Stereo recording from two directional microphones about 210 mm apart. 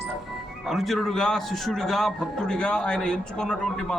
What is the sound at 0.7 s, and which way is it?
A man's voice, centre (ahead or behind).